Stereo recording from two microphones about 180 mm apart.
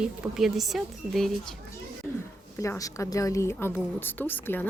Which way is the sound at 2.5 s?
20° left (ahead or behind).